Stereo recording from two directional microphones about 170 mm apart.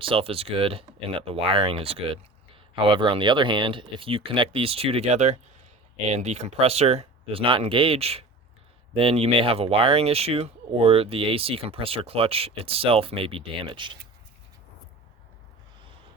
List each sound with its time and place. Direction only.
0.0 s speech: 30° right (ahead or behind)